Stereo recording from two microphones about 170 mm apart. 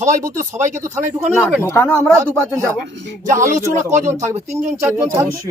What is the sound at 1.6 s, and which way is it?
Speech, 15° left (ahead or behind).